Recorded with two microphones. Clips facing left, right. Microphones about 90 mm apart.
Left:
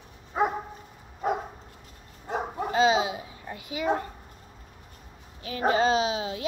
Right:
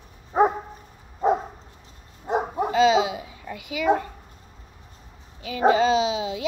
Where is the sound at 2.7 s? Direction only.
30° left (ahead or behind).